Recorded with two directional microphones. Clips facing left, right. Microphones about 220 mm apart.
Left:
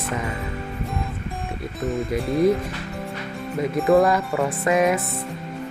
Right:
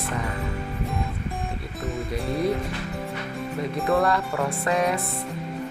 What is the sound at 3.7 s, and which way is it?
Speech, centre (ahead or behind).